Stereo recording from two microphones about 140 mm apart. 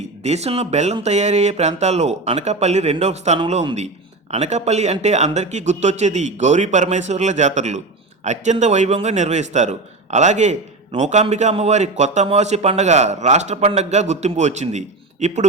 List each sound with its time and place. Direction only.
0.2 s a man's voice: 50° right (ahead or behind)